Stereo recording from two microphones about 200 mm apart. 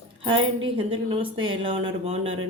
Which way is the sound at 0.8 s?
25° right (ahead or behind).